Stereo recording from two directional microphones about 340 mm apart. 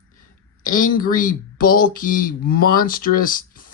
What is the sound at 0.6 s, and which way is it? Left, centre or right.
Speech, left.